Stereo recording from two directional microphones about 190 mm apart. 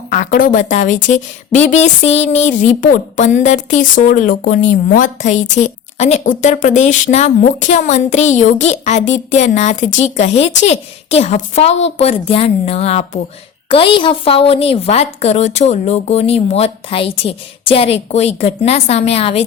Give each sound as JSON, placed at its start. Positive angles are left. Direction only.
{"t": 0.1, "sound": "a woman's voice", "side_deg": 45}